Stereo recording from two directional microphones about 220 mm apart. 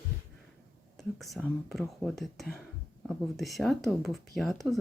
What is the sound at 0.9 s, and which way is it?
Speech, centre (ahead or behind).